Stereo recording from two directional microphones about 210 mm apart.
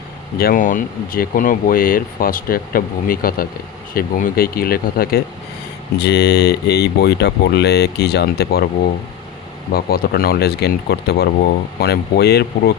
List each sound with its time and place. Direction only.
0.3 s speech: 40° left (ahead or behind)